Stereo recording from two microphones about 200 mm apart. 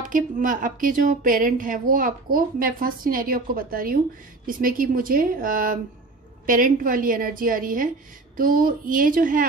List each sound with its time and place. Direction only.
0.0 s a woman's voice: 40° right (ahead or behind)